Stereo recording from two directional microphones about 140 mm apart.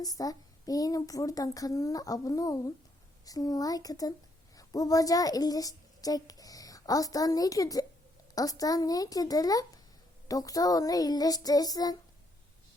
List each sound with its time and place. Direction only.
0.0 s a woman's voice: 25° left (ahead or behind)